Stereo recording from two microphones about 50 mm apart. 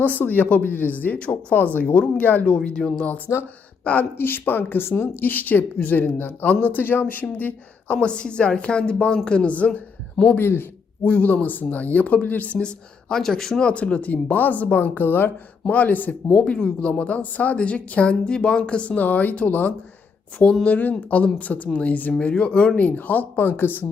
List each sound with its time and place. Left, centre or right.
0.0 s speech: left
2.8 s speech: centre
3.3 s speech: left
4.2 s speech: left
7.9 s a woman's voice: centre
10.3 s a man's voice: left
11.0 s speech: left; by 13.6 s centre
13.6 s speech: left
16.5 s a woman's voice: left
18.9 s speech: left